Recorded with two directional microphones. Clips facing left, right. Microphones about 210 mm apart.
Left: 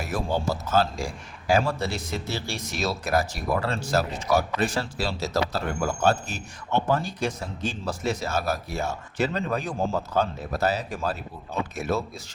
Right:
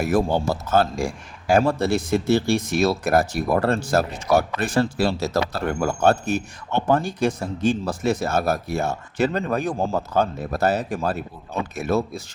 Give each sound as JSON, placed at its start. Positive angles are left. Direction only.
{"t": 0.0, "sound": "speech", "side_deg": -55}